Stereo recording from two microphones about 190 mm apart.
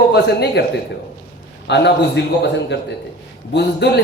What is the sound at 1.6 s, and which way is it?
A man's voice, 65° left (ahead or behind).